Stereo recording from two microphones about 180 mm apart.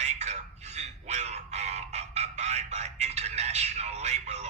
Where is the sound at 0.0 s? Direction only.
40° right (ahead or behind).